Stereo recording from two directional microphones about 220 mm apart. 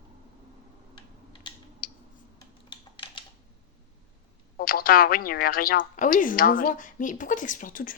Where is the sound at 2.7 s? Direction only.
20° left (ahead or behind).